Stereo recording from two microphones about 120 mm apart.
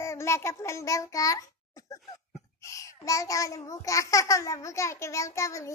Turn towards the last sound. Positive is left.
turn(degrees=25)  # may be behind; listen again after turning